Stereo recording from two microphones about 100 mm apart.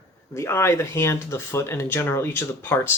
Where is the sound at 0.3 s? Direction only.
25° left (ahead or behind).